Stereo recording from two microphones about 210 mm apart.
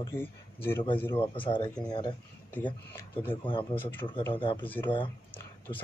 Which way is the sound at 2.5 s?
10° left (ahead or behind).